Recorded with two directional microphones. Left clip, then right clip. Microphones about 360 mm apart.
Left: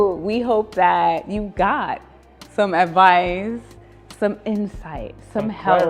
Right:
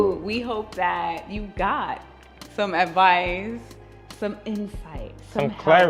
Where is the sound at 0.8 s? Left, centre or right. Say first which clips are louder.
Left 7 dB; left.